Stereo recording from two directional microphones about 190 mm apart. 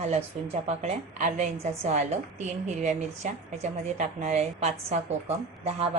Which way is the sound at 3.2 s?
40° right (ahead or behind).